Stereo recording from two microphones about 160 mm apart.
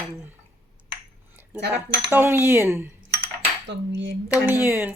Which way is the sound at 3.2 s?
90° right.